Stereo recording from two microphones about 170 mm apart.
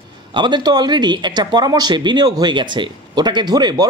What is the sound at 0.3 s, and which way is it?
Speech, 25° right (ahead or behind).